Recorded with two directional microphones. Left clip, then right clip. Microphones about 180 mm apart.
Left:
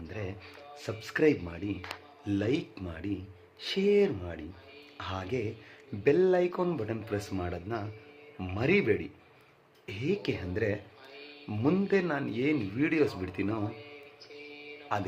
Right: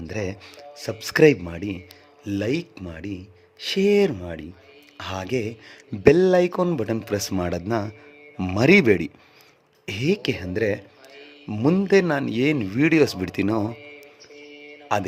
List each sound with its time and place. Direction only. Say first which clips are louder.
0.1 s speech: right 11 dB; 55° right (ahead or behind)
1.3 s speech: right 7 dB; 45° right (ahead or behind)
3.6 s speech: right 7 dB; 45° right (ahead or behind); by 9.0 s 70° right (ahead or behind)
9.8 s speech: right 9 dB; 55° right (ahead or behind)
14.9 s speech: right 9 dB; 45° right (ahead or behind)